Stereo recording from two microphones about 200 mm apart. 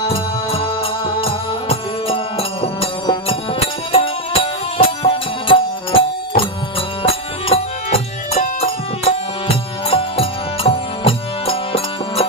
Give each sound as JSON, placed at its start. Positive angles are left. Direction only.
{"t": 0.1, "sound": "music", "side_deg": 30}